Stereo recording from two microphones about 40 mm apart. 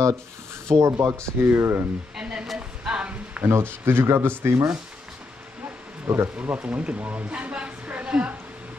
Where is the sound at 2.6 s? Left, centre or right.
Right.